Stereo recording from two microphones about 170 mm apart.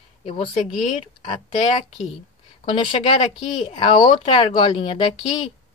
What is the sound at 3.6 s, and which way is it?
A woman's voice, 30° left (ahead or behind).